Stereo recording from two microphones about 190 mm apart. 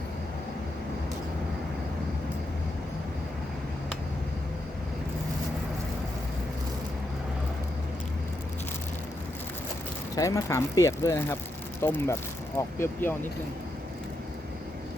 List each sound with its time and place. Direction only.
10.2 s speech: 15° left (ahead or behind)